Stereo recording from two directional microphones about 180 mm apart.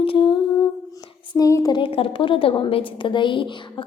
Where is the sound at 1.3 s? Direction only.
20° left (ahead or behind).